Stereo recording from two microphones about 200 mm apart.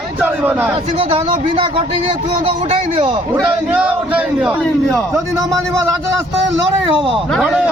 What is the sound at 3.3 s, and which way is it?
A man's voice, 10° right (ahead or behind).